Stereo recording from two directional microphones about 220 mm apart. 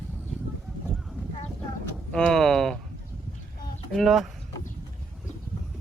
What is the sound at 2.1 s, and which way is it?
Speech, centre (ahead or behind).